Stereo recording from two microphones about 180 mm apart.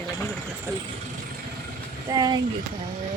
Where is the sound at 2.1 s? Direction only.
25° right (ahead or behind).